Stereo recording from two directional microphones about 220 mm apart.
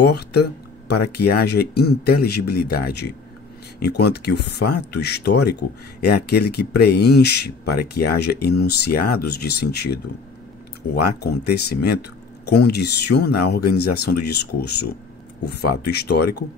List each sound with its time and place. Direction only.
0.0 s speech: 50° left (ahead or behind)
11.1 s speech: 45° left (ahead or behind)